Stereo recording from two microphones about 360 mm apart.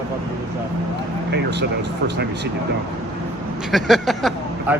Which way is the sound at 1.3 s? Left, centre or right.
Right.